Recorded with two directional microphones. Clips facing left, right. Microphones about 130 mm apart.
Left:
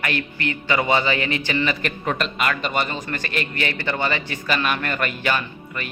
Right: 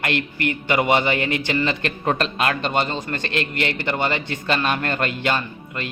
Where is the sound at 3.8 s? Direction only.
20° right (ahead or behind).